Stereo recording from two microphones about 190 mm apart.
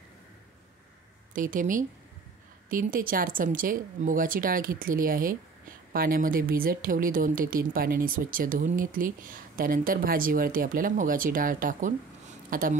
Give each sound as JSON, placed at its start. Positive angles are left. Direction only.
{"t": 1.3, "sound": "speech", "side_deg": -45}